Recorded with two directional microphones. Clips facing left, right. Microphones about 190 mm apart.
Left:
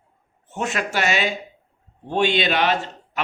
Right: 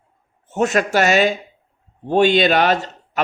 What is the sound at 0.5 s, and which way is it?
Speech, 40° right (ahead or behind).